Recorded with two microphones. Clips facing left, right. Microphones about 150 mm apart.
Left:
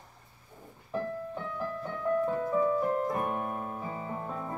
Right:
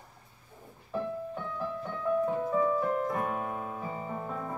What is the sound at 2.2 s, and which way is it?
Music, 15° right (ahead or behind).